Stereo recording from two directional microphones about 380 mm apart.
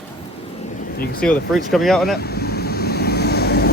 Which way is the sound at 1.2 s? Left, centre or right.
Centre.